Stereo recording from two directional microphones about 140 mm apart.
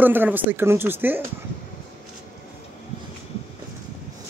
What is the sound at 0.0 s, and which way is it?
Speech, 15° right (ahead or behind).